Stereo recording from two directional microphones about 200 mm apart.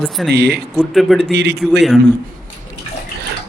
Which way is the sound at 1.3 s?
60° right (ahead or behind).